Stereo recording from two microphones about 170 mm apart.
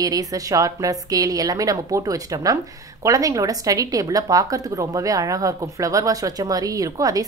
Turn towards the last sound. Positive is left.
turn(degrees=-20)  # may be behind; listen again after turning